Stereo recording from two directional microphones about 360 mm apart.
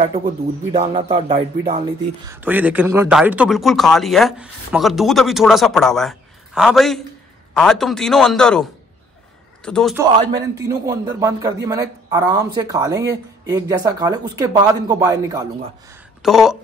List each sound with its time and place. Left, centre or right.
0.2 s a man's voice: centre
9.7 s speech: centre
10.3 s a man's voice: centre